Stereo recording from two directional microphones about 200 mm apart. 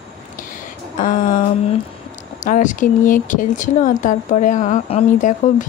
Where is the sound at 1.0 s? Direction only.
40° left (ahead or behind).